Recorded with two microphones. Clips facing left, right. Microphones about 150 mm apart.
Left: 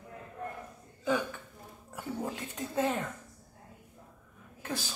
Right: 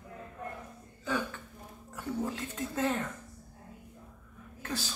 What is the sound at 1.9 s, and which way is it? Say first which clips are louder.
Speech: right 2 dB; 15° left (ahead or behind).